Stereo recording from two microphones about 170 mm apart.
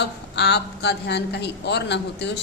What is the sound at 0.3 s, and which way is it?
A man's voice, 80° left.